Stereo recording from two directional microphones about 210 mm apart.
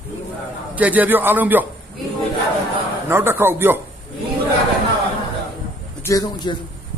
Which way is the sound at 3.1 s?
10° right (ahead or behind).